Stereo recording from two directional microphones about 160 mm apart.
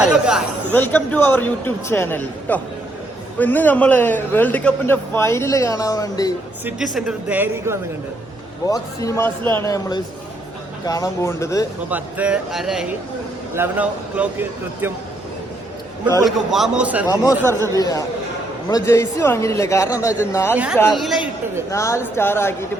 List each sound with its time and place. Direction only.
0.0 s chatter: 5° right (ahead or behind)
0.7 s a man's voice: 10° left (ahead or behind)
6.7 s a man's voice: 5° right (ahead or behind)
8.6 s speech: 20° left (ahead or behind)
11.9 s a man's voice: 10° right (ahead or behind)
16.2 s speech: centre (ahead or behind)
17.7 s speech: 20° left (ahead or behind)
20.9 s speech: centre (ahead or behind)
21.7 s a man's voice: 20° left (ahead or behind)